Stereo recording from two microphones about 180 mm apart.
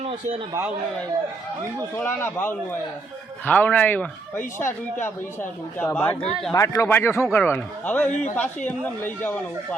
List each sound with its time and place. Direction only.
2.0 s speech: 10° left (ahead or behind)
8.1 s speech: 40° left (ahead or behind)
8.4 s speech: 10° left (ahead or behind)